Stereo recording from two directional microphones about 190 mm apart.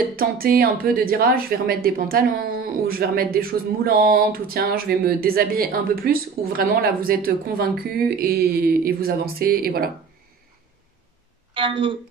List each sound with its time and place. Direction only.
0.1 s a woman's voice: 50° right (ahead or behind)
11.5 s speech: 25° right (ahead or behind)